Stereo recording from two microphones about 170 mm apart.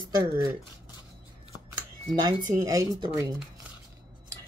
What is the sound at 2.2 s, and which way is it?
Speech, 20° right (ahead or behind).